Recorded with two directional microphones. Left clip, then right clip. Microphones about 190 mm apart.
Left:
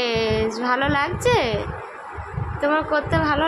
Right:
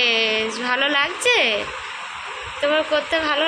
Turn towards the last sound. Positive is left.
turn(degrees=25)  # may be behind; listen again after turning